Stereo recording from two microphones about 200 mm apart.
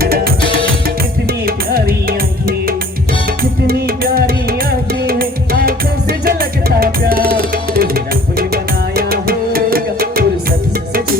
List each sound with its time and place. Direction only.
0.0 s music: 50° right (ahead or behind)